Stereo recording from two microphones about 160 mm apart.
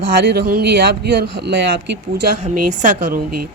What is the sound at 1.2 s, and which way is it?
Speech, 90° right.